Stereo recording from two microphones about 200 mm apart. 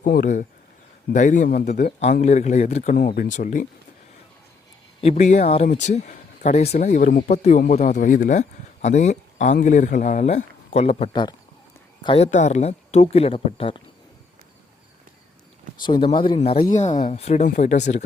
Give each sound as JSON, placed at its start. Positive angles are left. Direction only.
{"t": 0.0, "sound": "speech", "side_deg": 45}
{"t": 2.2, "sound": "speech", "side_deg": 35}
{"t": 4.9, "sound": "speech", "side_deg": 35}
{"t": 15.8, "sound": "speech", "side_deg": 25}